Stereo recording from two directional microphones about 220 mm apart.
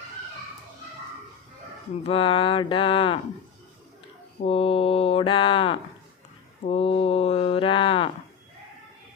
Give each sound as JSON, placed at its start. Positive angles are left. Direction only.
{"t": 2.0, "sound": "speech", "side_deg": 25}
{"t": 4.4, "sound": "speech", "side_deg": 25}